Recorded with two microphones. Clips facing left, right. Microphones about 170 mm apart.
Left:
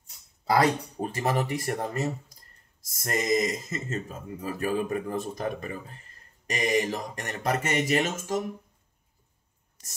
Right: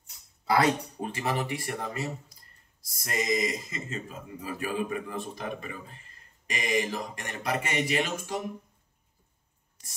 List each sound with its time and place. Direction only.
0.5 s speech: 40° left (ahead or behind)